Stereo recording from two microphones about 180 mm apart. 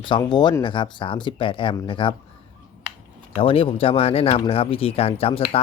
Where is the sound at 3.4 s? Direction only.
30° left (ahead or behind).